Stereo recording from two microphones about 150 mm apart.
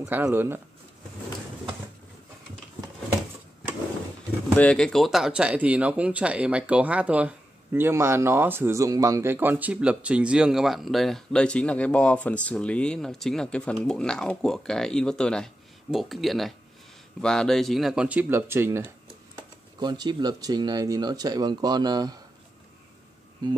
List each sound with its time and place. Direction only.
0.0 s speech: 15° right (ahead or behind)
4.6 s speech: 5° left (ahead or behind); by 18.9 s 15° right (ahead or behind)
19.8 s speech: 30° right (ahead or behind)